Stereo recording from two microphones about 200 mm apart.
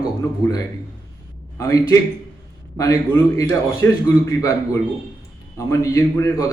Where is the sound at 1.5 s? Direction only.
15° left (ahead or behind).